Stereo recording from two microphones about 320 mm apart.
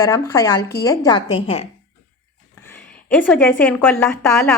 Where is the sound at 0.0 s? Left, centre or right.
Centre.